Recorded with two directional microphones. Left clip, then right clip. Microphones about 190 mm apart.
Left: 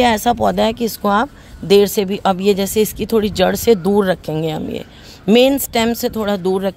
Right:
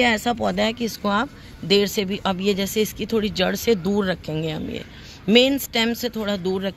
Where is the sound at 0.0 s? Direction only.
55° left (ahead or behind).